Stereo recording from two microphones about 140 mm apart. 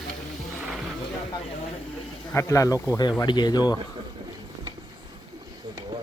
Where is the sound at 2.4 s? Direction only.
20° left (ahead or behind).